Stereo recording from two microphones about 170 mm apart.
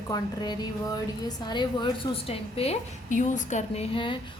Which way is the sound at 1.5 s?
25° left (ahead or behind).